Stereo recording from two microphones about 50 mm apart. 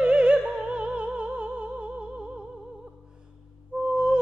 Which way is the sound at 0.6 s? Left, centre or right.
Right.